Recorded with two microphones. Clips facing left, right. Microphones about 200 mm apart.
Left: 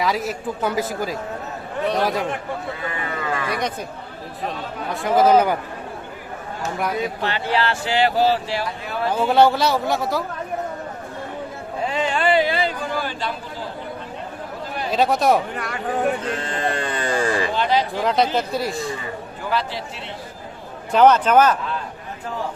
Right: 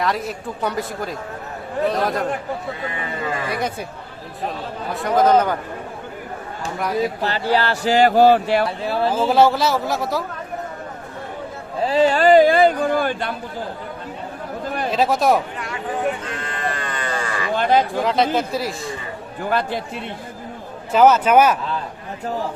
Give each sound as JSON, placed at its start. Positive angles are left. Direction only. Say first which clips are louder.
{"t": 0.0, "sound": "a man's voice", "louder": "left 1 dB", "side_deg": 0}
{"t": 3.5, "sound": "speech", "louder": "right 1 dB", "side_deg": -5}
{"t": 6.7, "sound": "a man's voice", "louder": "right 3 dB", "side_deg": 0}
{"t": 7.2, "sound": "a man's voice", "louder": "right 2 dB", "side_deg": -40}
{"t": 8.8, "sound": "a man's voice", "louder": "right 5 dB", "side_deg": -30}
{"t": 9.0, "sound": "a man's voice", "louder": "even", "side_deg": 0}
{"t": 11.8, "sound": "a sound", "louder": "right 6 dB", "side_deg": -35}
{"t": 14.8, "sound": "a man's voice", "louder": "even", "side_deg": 0}
{"t": 16.4, "sound": "a sound", "louder": "left 3 dB", "side_deg": 30}
{"t": 17.5, "sound": "a sound", "louder": "right 3 dB", "side_deg": -50}
{"t": 18.0, "sound": "a man's voice", "louder": "right 1 dB", "side_deg": 0}
{"t": 19.4, "sound": "a man's voice", "louder": "right 4 dB", "side_deg": -50}
{"t": 20.9, "sound": "speech", "louder": "right 1 dB", "side_deg": -5}